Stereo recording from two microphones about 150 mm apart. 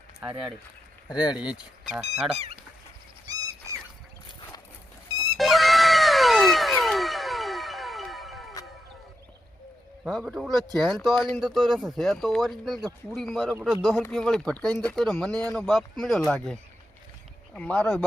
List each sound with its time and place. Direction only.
1.1 s speech: 30° left (ahead or behind)
1.4 s speech: 5° right (ahead or behind)
3.3 s a sound: 25° right (ahead or behind)
5.4 s cat: centre (ahead or behind)
10.1 s speech: centre (ahead or behind)